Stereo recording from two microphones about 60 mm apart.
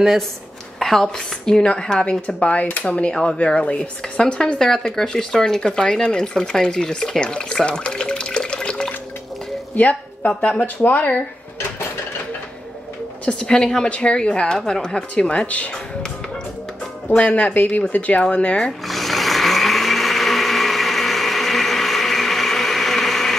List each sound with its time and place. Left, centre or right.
0.7 s a woman's voice: centre
9.8 s speech: left
13.2 s a woman's voice: centre
17.1 s speech: left
18.9 s blender: centre